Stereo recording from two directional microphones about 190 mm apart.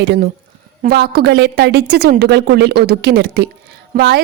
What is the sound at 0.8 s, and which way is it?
A woman's voice, 55° right (ahead or behind).